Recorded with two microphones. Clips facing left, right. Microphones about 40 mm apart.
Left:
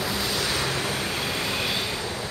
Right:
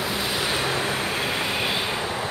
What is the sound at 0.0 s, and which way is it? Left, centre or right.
Vehicle, right.